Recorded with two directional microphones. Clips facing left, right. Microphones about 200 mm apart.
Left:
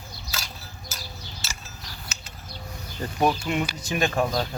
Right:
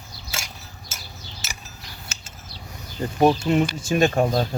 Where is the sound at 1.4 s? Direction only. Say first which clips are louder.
Right 1 dB; 20° right (ahead or behind).